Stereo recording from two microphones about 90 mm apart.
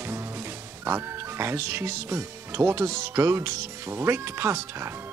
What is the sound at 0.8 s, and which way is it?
Speech, 25° right (ahead or behind).